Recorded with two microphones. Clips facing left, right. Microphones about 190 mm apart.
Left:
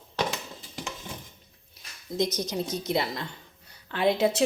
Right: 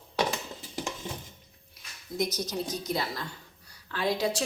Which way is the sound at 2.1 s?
20° left (ahead or behind).